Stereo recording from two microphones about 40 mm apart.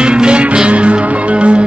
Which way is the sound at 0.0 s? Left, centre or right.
Right.